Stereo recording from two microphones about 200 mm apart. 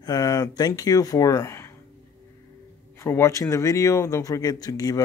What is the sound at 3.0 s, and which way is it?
Speech, 15° left (ahead or behind).